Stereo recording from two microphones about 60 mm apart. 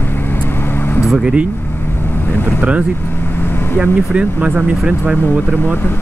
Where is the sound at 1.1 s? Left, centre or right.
Centre.